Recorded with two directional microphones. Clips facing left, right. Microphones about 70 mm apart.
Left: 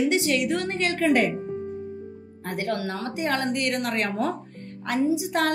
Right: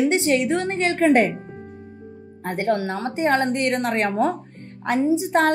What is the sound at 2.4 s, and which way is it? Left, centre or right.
Speech, right.